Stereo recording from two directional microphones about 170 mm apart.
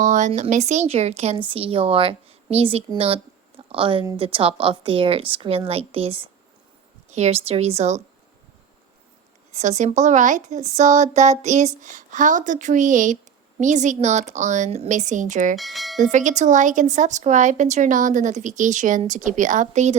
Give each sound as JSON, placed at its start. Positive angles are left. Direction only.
{"t": 0.0, "sound": "speech", "side_deg": -45}
{"t": 9.6, "sound": "a woman's voice", "side_deg": -45}
{"t": 15.5, "sound": "speech", "side_deg": 0}
{"t": 16.1, "sound": "a woman's voice", "side_deg": -45}